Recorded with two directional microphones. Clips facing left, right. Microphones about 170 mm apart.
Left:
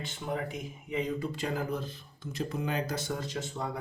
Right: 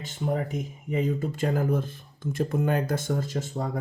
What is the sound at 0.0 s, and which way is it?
Speech, 45° right (ahead or behind).